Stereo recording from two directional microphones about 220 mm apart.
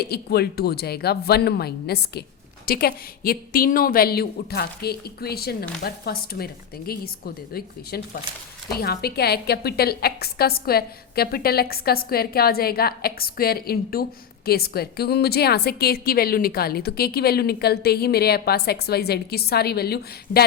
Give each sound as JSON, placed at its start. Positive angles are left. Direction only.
{"t": 0.0, "sound": "a woman's voice", "side_deg": 45}